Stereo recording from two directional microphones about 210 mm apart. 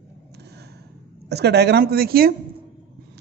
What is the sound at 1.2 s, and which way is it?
A woman's voice, 50° right (ahead or behind).